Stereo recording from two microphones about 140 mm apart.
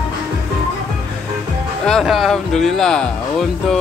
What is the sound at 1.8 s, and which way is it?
Speech, centre (ahead or behind).